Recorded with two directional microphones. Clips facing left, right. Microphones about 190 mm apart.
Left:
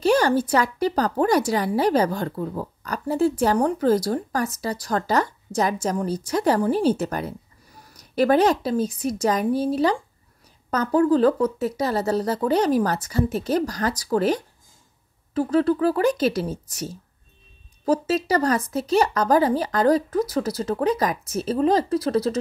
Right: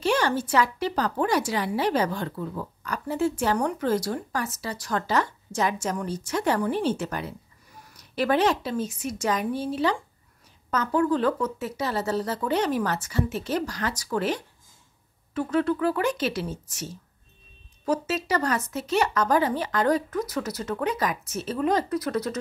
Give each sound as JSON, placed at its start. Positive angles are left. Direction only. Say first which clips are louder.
{"t": 0.0, "sound": "speech", "louder": "left 5 dB", "side_deg": 40}